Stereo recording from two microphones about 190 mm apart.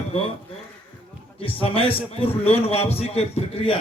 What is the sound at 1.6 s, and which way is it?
A man's voice, 30° left (ahead or behind).